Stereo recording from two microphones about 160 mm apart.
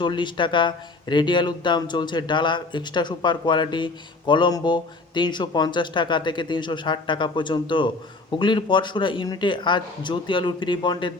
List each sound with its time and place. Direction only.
0.0 s speech: 30° left (ahead or behind)